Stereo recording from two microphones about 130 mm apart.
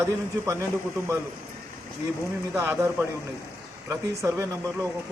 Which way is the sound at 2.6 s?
20° right (ahead or behind).